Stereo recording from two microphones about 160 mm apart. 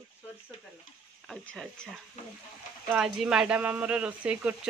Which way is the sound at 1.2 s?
Centre (ahead or behind).